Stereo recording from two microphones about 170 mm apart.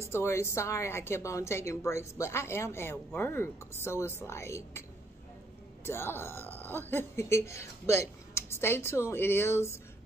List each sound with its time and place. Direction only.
0.1 s speech: 15° left (ahead or behind)
5.9 s speech: 15° left (ahead or behind)